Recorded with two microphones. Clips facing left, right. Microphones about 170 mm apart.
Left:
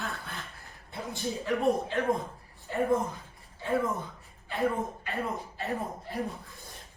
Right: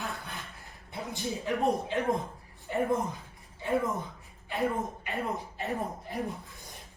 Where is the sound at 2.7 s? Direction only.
15° right (ahead or behind).